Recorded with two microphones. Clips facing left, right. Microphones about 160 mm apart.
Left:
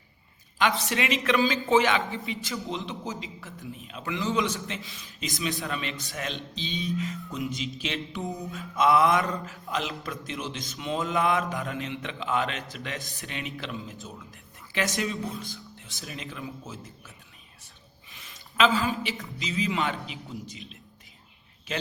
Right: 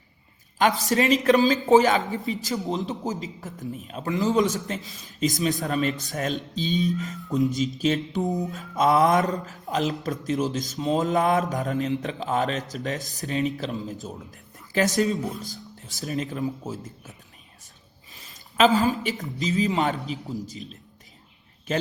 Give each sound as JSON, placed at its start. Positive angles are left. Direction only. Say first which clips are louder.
{"t": 0.8, "sound": "a man's voice", "louder": "right 7 dB", "side_deg": -40}
{"t": 18.1, "sound": "a sound", "louder": "right 1 dB", "side_deg": -40}
{"t": 19.4, "sound": "speech", "louder": "right 5 dB", "side_deg": -40}